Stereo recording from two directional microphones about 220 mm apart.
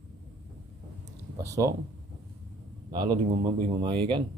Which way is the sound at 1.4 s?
15° right (ahead or behind).